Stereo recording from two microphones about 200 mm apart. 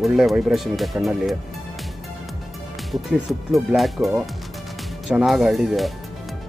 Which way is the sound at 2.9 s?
Centre (ahead or behind).